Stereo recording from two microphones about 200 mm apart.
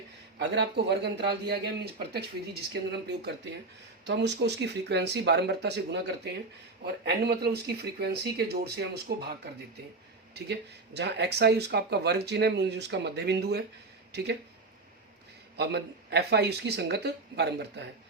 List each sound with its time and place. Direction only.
0.3 s speech: 55° right (ahead or behind)
15.5 s speech: 55° right (ahead or behind)